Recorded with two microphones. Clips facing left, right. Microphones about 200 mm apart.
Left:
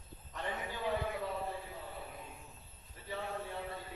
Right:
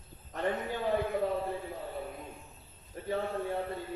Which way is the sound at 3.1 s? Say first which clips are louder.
Right 8 dB; 55° right (ahead or behind).